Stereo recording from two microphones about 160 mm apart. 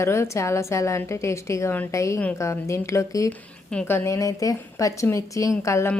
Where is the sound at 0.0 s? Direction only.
15° left (ahead or behind).